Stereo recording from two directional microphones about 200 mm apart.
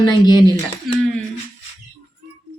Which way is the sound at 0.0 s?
20° left (ahead or behind).